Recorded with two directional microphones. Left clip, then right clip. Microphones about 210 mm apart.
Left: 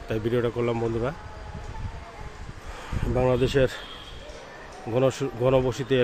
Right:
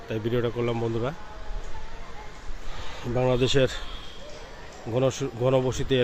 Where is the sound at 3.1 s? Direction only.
Centre (ahead or behind).